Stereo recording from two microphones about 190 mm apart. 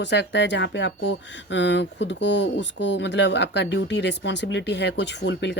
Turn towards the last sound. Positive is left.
turn(degrees=65)  # may be behind; listen again after turning